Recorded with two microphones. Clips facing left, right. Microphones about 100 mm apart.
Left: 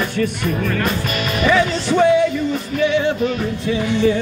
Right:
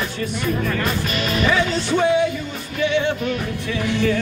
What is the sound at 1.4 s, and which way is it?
Music, 45° left (ahead or behind).